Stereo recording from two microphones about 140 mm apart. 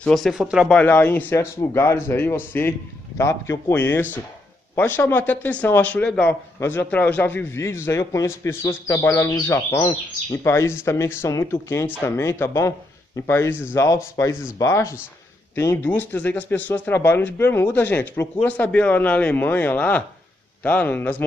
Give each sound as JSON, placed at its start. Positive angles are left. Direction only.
{"t": 0.0, "sound": "speech", "side_deg": 0}
{"t": 0.7, "sound": "a man's voice", "side_deg": 10}